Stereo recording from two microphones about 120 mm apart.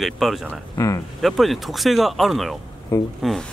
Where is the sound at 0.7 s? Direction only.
25° left (ahead or behind).